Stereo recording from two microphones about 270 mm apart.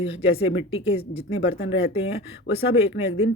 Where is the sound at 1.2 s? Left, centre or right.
Left.